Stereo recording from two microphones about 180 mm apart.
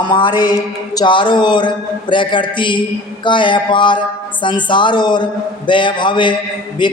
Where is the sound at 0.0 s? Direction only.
25° left (ahead or behind).